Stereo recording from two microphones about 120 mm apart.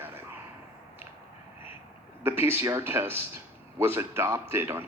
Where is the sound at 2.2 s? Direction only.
20° right (ahead or behind).